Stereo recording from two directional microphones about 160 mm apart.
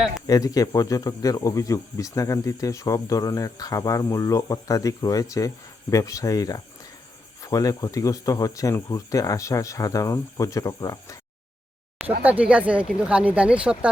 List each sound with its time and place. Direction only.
0.3 s speech: 20° left (ahead or behind)
12.2 s speech: 10° right (ahead or behind)